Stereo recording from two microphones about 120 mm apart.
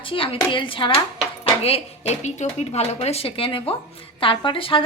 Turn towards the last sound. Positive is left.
turn(degrees=50)  # may be behind; listen again after turning